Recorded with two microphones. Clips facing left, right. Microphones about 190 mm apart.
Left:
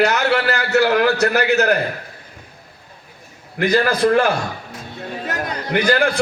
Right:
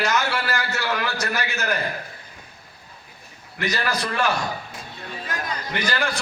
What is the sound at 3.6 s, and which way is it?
Speech, 55° left (ahead or behind).